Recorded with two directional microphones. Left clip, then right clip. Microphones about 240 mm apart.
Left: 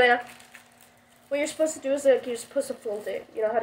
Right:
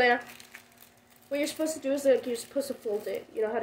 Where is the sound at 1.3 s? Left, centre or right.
Centre.